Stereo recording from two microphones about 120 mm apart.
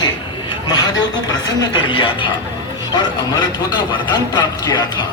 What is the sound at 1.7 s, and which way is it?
Speech, 45° left (ahead or behind).